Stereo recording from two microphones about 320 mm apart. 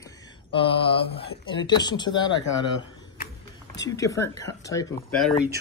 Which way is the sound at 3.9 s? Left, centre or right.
Centre.